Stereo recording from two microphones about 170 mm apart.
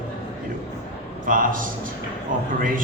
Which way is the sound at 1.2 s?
55° right (ahead or behind).